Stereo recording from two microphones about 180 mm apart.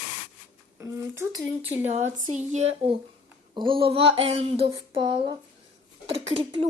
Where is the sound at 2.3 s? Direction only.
40° right (ahead or behind).